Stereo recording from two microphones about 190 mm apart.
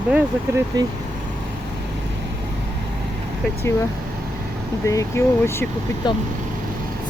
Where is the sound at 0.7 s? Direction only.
20° right (ahead or behind).